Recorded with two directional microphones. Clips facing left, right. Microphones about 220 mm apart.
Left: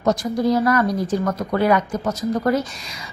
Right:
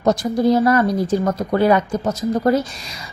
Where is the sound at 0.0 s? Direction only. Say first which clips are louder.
Right 3 dB; 30° right (ahead or behind).